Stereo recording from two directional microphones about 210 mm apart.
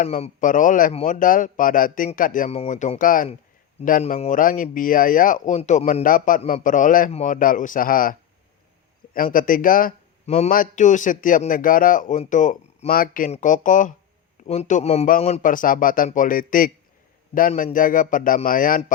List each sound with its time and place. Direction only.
0.0 s speech: 35° left (ahead or behind)
9.1 s speech: 40° left (ahead or behind)